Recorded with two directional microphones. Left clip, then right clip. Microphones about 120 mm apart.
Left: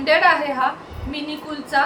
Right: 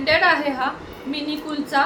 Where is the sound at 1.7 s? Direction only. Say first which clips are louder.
Left 1 dB; 15° right (ahead or behind).